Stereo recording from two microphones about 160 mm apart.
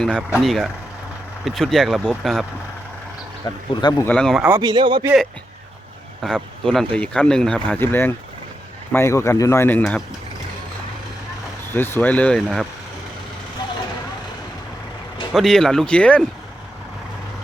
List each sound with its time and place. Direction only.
0.0 s speech: 5° left (ahead or behind)
3.4 s speech: 25° left (ahead or behind)
4.0 s speech: 5° left (ahead or behind)
4.4 s speech: 15° right (ahead or behind)
4.7 s speech: 30° right (ahead or behind)
6.2 s speech: 5° left (ahead or behind)
11.7 s speech: 15° left (ahead or behind)
15.3 s speech: centre (ahead or behind)